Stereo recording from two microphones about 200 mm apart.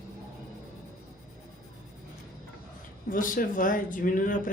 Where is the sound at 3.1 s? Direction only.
45° left (ahead or behind).